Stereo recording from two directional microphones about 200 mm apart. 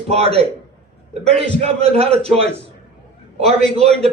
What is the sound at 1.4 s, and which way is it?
A man's voice, 30° right (ahead or behind).